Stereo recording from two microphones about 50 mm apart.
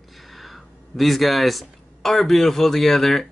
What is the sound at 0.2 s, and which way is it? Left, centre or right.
Speech, centre.